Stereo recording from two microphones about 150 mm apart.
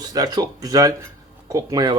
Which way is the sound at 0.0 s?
25° right (ahead or behind).